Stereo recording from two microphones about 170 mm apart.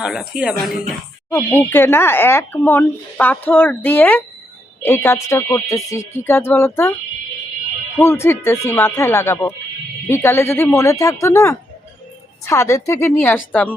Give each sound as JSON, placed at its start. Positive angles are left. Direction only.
{"t": 0.0, "sound": "speech", "side_deg": -5}
{"t": 1.3, "sound": "speech", "side_deg": 15}
{"t": 7.9, "sound": "speech", "side_deg": 15}